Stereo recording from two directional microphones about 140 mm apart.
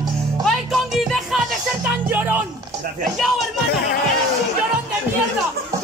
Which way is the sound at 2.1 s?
15° right (ahead or behind).